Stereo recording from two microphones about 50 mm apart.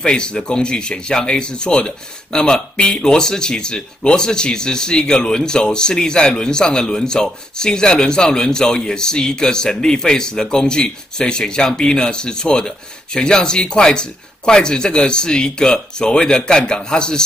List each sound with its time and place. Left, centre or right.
0.0 s speech: centre